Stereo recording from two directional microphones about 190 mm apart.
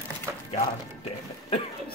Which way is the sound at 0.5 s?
35° left (ahead or behind).